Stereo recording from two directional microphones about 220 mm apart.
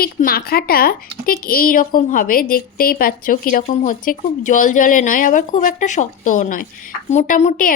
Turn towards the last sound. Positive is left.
turn(degrees=35)  # may be behind; listen again after turning